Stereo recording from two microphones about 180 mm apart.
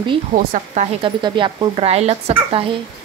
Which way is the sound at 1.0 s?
25° right (ahead or behind).